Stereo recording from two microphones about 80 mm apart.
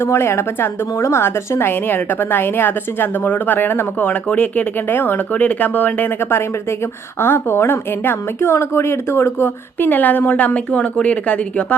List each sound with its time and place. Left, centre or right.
0.0 s a woman's voice: left; by 11.8 s centre